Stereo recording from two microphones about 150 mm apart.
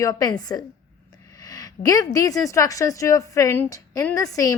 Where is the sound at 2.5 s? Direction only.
20° left (ahead or behind).